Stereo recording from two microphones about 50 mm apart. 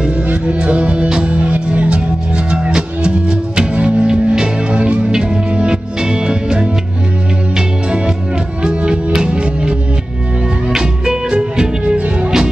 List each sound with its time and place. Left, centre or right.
0.3 s music: right
8.6 s music: centre